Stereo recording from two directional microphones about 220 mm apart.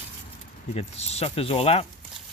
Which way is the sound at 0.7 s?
30° left (ahead or behind).